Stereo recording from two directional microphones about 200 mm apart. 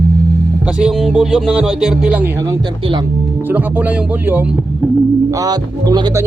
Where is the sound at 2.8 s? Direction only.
25° right (ahead or behind).